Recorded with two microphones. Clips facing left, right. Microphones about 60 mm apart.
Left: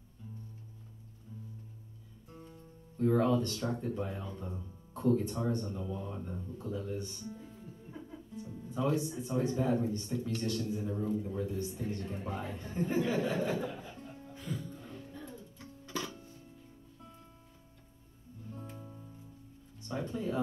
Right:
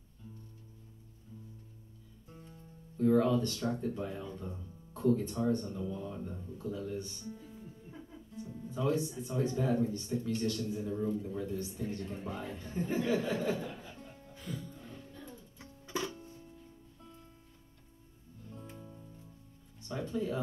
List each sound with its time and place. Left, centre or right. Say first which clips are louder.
2.2 s speech: left 2 dB; centre
6.4 s music: right 1 dB; centre
8.6 s a man's voice: even; centre
14.4 s music: left 2 dB; centre
15.0 s music: left 3 dB; centre
15.6 s music: right 2 dB; centre
18.5 s music: left 2 dB; centre
19.9 s speech: right 1 dB; centre